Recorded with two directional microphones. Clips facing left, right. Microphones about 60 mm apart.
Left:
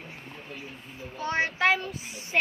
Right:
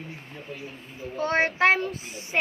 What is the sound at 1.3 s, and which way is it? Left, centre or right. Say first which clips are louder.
Child singing: right 3 dB; right.